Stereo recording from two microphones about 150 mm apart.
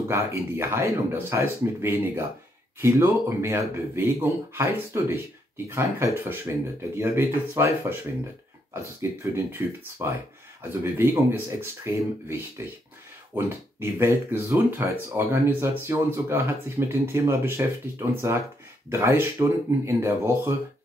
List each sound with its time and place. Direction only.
0.1 s speech: 20° right (ahead or behind)
9.2 s speech: 20° right (ahead or behind)